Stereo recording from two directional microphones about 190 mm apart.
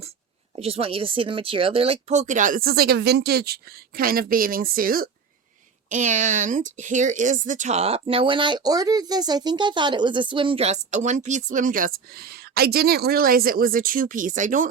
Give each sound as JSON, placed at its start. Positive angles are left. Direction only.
{"t": 0.5, "sound": "speech", "side_deg": -30}